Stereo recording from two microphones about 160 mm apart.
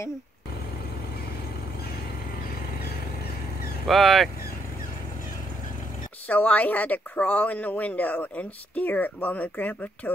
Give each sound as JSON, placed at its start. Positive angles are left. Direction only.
{"t": 3.8, "sound": "speech", "side_deg": 0}
{"t": 6.2, "sound": "speech", "side_deg": 10}